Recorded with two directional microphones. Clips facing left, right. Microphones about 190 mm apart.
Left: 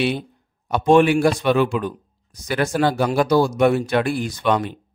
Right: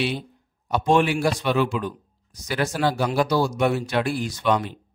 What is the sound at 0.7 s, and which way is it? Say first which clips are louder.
A man's voice: left 5 dB; 55° left (ahead or behind).